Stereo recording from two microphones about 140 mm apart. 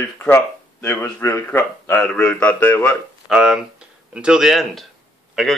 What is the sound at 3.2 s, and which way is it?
Speech, 5° right (ahead or behind).